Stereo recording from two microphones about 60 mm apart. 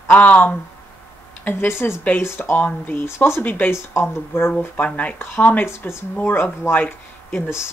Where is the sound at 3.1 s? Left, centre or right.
Left.